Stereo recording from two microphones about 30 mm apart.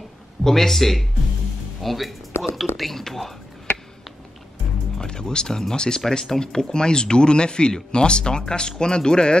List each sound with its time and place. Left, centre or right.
0.4 s speech: centre
4.9 s speech: left